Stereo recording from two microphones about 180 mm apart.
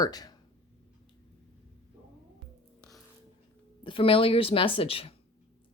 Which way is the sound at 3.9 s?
30° left (ahead or behind).